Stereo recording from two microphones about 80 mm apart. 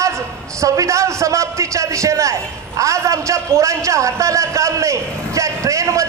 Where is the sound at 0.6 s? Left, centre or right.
Right.